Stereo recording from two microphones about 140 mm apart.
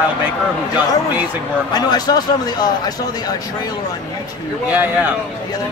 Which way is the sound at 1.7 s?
30° left (ahead or behind).